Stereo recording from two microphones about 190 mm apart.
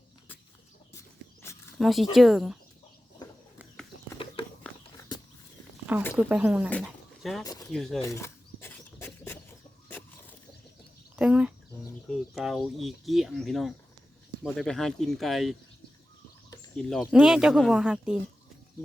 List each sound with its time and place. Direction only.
1.8 s speech: centre (ahead or behind)
4.7 s walk: 5° left (ahead or behind)
6.1 s speech: 5° right (ahead or behind)
7.4 s speech: 20° left (ahead or behind)
7.7 s speech: centre (ahead or behind)
8.0 s a sound: 15° left (ahead or behind)
11.2 s a sound: 5° right (ahead or behind)
12.8 s speech: centre (ahead or behind)
16.7 s speech: centre (ahead or behind)